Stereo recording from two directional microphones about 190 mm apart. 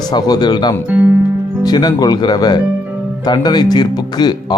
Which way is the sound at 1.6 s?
20° left (ahead or behind).